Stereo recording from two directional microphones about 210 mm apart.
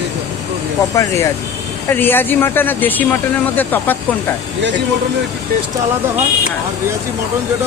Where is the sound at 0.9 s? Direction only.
15° left (ahead or behind).